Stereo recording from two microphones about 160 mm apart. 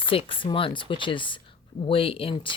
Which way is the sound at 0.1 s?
35° left (ahead or behind).